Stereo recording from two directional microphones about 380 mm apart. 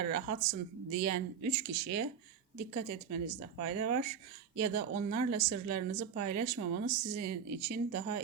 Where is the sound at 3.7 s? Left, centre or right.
Right.